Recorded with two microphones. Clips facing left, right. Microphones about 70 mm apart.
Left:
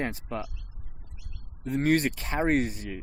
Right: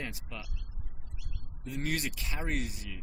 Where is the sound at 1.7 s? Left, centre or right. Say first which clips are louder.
Left 11 dB; left.